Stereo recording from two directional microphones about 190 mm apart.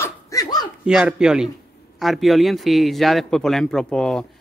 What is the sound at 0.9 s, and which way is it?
Speech, 5° right (ahead or behind).